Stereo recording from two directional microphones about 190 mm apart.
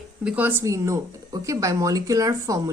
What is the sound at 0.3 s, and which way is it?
A woman's voice, 10° right (ahead or behind).